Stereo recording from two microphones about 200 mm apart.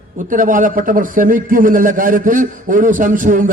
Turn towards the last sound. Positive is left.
turn(degrees=-40)  # may be behind; listen again after turning